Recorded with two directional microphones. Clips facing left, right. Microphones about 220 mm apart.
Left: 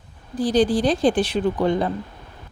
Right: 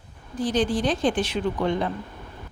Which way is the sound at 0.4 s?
35° left (ahead or behind).